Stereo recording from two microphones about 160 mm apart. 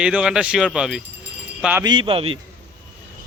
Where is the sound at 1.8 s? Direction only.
30° right (ahead or behind).